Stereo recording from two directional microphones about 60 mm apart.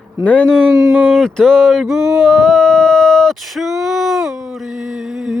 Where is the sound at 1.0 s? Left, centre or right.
Centre.